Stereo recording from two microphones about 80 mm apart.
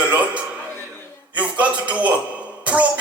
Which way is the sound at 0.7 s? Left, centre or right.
Left.